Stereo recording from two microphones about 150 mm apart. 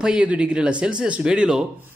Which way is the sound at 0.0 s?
5° right (ahead or behind).